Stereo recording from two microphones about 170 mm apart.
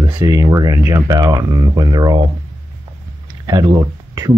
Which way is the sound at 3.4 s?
25° right (ahead or behind).